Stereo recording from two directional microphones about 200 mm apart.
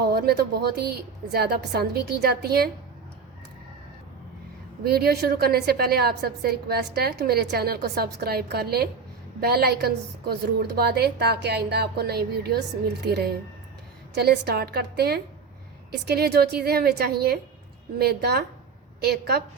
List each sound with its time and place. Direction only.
0.0 s a woman's voice: 50° right (ahead or behind)
4.8 s a woman's voice: 50° right (ahead or behind)